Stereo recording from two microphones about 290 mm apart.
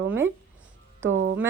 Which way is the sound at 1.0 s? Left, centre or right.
Right.